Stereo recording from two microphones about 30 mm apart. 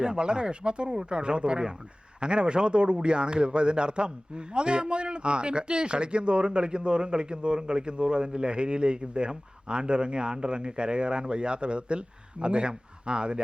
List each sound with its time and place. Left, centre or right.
0.0 s a man's voice: right